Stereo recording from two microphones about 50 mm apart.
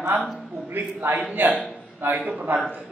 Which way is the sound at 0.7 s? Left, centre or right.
Right.